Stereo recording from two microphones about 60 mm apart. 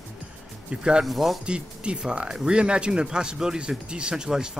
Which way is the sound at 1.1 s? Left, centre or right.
Centre.